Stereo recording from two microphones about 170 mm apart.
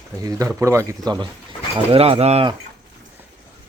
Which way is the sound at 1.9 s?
35° right (ahead or behind).